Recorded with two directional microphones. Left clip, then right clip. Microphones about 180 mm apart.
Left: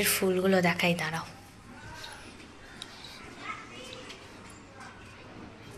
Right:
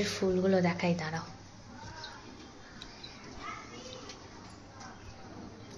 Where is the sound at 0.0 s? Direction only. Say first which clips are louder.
Left 3 dB; centre (ahead or behind).